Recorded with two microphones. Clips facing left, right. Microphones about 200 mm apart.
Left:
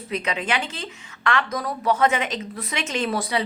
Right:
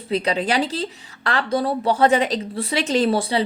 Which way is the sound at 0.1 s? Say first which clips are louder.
Right 5 dB; 35° right (ahead or behind).